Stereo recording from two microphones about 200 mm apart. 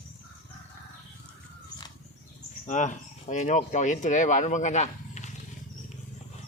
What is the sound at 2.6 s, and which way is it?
Speech, 40° left (ahead or behind).